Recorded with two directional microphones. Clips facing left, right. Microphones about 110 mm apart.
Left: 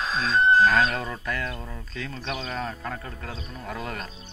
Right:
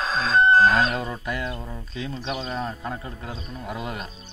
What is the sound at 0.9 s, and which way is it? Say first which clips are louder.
Speech: right 2 dB; 15° right (ahead or behind).